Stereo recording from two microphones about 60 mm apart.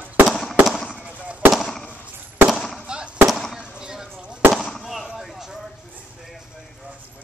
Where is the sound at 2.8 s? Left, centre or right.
Centre.